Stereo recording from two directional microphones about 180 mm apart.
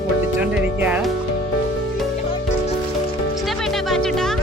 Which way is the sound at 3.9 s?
5° left (ahead or behind).